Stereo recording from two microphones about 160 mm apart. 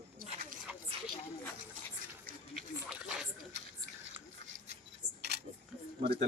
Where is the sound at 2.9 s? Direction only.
5° right (ahead or behind).